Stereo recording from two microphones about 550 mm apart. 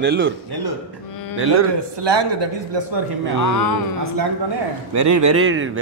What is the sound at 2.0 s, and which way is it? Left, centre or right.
Speech, right.